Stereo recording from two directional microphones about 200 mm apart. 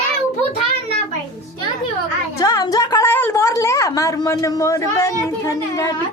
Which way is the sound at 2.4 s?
20° left (ahead or behind).